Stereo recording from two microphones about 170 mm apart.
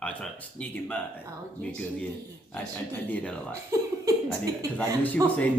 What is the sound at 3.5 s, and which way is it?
Speech, 15° right (ahead or behind).